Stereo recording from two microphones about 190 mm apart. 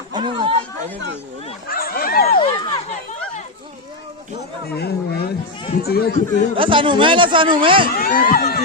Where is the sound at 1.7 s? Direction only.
50° left (ahead or behind).